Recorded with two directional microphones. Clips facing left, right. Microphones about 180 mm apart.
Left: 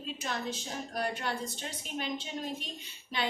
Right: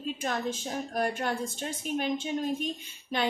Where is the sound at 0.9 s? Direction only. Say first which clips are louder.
Right 4 dB; 45° right (ahead or behind).